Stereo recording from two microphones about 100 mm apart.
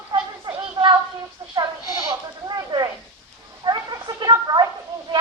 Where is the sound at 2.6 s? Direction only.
40° right (ahead or behind).